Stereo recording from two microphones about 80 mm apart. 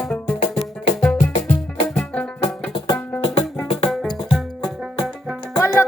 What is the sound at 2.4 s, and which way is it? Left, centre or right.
Music, left.